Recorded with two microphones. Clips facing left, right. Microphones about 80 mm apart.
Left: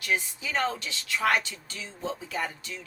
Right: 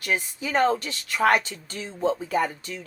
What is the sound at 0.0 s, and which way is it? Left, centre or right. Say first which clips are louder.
Speech: right 2 dB; right.